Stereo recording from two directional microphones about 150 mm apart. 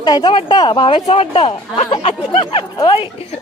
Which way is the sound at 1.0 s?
45° left (ahead or behind).